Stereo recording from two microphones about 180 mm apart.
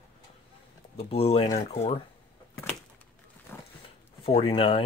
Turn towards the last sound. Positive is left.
turn(degrees=30)  # may be behind; listen again after turning